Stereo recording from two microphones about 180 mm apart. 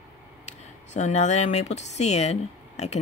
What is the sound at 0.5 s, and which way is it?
Speech, 40° left (ahead or behind).